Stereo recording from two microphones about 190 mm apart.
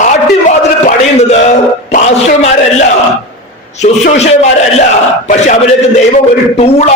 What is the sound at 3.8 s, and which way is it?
A man's voice, 35° left (ahead or behind).